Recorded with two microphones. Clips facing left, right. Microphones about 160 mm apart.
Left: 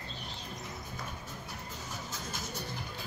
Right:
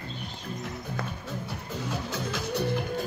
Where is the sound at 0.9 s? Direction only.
70° right (ahead or behind).